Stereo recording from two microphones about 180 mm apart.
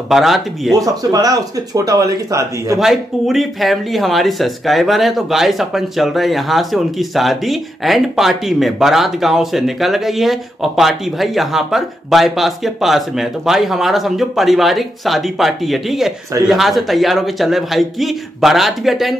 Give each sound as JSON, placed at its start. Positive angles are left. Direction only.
{"t": 0.1, "sound": "speech", "side_deg": 0}
{"t": 0.7, "sound": "speech", "side_deg": -20}
{"t": 2.8, "sound": "speech", "side_deg": 0}